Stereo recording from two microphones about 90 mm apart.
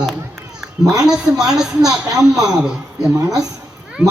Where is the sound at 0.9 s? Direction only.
5° right (ahead or behind).